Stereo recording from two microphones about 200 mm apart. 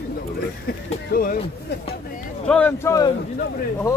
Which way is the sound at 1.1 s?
50° left (ahead or behind).